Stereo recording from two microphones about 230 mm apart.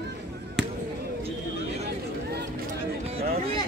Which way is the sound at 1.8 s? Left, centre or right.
Right.